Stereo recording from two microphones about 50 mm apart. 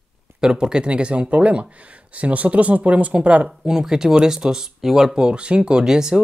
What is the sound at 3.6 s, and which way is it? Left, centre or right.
Speech, centre.